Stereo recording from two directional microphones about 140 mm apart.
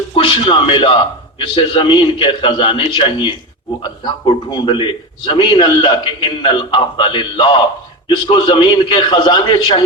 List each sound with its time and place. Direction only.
0.1 s a man's voice: 40° left (ahead or behind)
4.5 s a man's voice: 35° left (ahead or behind)